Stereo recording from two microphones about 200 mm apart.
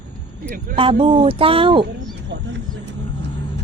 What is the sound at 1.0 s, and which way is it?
Speech, 25° right (ahead or behind).